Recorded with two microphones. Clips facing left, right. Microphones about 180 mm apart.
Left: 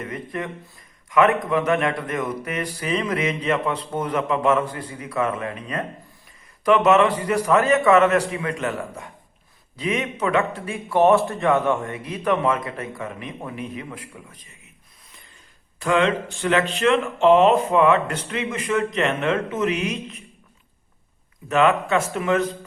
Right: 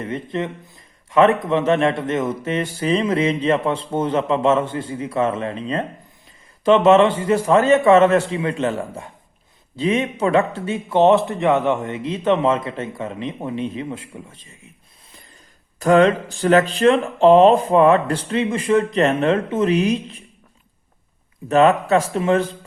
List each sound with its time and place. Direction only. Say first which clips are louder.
0.0 s speech: right 5 dB; 25° right (ahead or behind)
15.8 s speech: right 6 dB; 40° right (ahead or behind)
21.5 s speech: right 4 dB; 35° right (ahead or behind)